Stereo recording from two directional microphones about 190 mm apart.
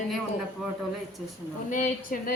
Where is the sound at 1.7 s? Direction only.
45° left (ahead or behind).